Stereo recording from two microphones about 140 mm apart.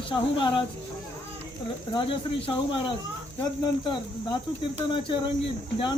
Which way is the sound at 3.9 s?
35° left (ahead or behind).